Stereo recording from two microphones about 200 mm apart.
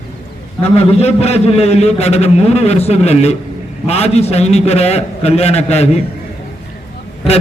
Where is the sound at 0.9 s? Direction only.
30° left (ahead or behind).